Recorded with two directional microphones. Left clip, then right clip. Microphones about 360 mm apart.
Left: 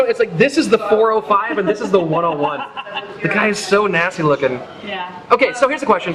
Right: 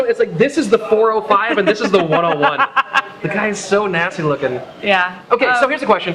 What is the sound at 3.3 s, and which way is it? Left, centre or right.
A man's voice, centre.